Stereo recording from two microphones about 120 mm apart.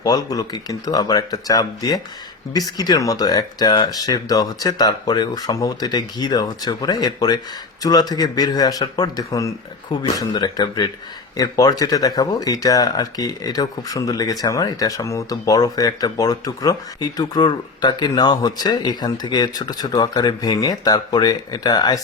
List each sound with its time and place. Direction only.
0.0 s speech: 30° left (ahead or behind)